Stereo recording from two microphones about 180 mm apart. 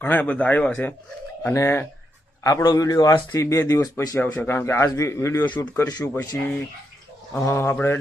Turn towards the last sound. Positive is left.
turn(degrees=10)  # may be behind; listen again after turning